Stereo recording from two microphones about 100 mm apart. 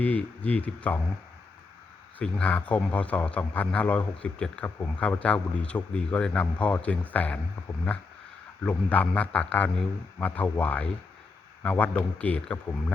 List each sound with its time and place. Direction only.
0.0 s a man's voice: 15° left (ahead or behind)
2.1 s a man's voice: 15° left (ahead or behind)
8.6 s a man's voice: 15° left (ahead or behind)